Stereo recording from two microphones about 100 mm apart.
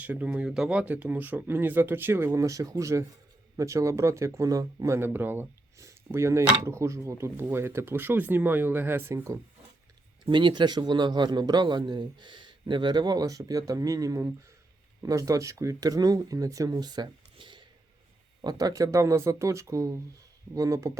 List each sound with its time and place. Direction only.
0.0 s speech: 15° right (ahead or behind)
10.2 s a man's voice: 50° right (ahead or behind)
17.3 s a sound: 55° right (ahead or behind)
18.4 s speech: 35° right (ahead or behind)